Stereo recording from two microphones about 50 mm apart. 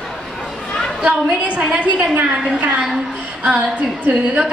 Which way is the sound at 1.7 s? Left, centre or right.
Right.